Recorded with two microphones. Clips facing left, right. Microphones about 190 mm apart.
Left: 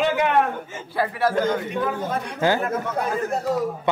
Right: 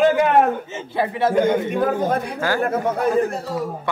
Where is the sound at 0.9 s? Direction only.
20° right (ahead or behind).